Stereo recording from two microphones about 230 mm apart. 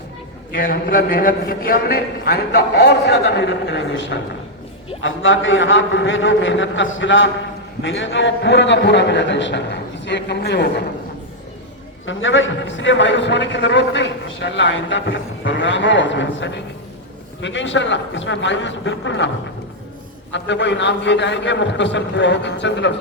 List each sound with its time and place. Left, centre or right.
0.5 s a man's voice: left
12.0 s a man's voice: left
20.3 s a man's voice: left